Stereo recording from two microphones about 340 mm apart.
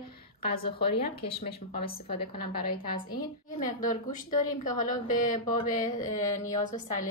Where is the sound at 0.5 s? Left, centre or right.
Left.